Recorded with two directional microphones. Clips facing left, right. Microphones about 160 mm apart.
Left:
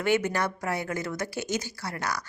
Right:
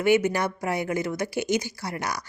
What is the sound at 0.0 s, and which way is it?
A woman's voice, 10° right (ahead or behind).